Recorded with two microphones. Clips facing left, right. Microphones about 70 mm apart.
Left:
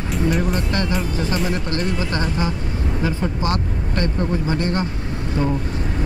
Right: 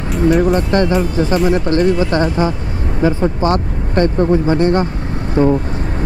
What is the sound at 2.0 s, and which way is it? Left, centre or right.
Speech, right.